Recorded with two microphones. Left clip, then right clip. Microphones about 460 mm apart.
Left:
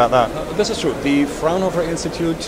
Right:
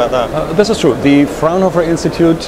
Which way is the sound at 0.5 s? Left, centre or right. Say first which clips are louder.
Right 8 dB; right.